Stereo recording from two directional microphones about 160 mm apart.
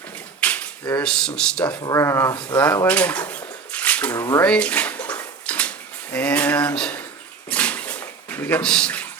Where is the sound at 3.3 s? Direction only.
10° left (ahead or behind).